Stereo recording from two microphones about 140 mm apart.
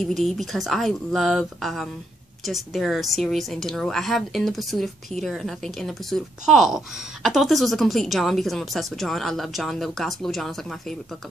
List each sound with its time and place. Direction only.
0.0 s a woman's voice: centre (ahead or behind)